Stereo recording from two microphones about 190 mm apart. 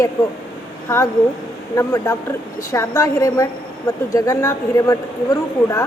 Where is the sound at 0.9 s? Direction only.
15° left (ahead or behind).